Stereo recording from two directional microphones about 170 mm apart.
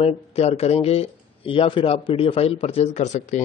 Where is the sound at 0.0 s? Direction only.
35° left (ahead or behind).